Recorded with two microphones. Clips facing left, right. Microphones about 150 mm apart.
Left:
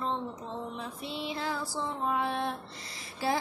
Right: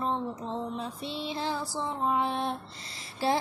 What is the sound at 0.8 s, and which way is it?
Female singing, 25° right (ahead or behind).